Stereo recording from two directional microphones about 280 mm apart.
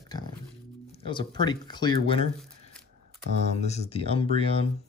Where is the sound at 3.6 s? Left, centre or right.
Left.